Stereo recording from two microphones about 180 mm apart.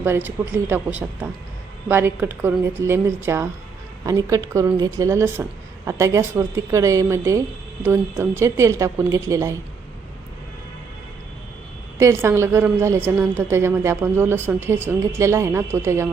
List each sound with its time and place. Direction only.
0.0 s a woman's voice: 10° right (ahead or behind)
11.9 s a woman's voice: 15° right (ahead or behind)